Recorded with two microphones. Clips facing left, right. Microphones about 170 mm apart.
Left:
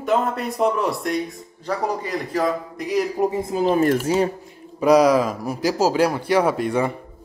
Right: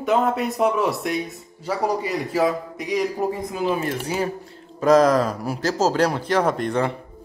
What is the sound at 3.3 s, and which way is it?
Speech, 30° left (ahead or behind).